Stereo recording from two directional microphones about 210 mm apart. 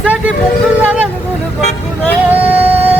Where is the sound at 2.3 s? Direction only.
5° right (ahead or behind).